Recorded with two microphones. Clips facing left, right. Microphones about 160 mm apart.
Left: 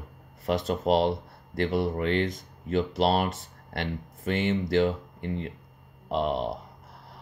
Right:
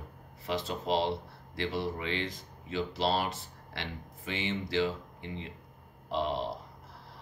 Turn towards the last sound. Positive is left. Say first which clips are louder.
# left 5 dB
turn(degrees=50)  # may be behind; listen again after turning